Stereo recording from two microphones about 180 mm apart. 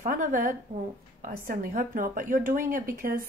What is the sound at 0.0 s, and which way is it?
A woman's voice, 50° right (ahead or behind).